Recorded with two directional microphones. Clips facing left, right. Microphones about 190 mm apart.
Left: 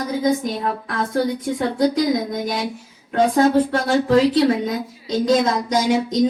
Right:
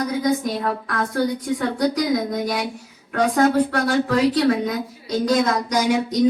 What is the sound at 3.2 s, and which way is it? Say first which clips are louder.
Speech: left 2 dB; 25° left (ahead or behind).